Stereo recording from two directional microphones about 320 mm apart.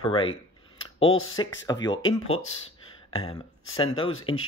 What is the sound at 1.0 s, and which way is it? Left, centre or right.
Speech, left.